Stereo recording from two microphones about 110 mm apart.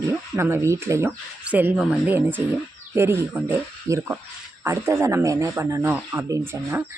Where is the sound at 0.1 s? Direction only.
20° right (ahead or behind).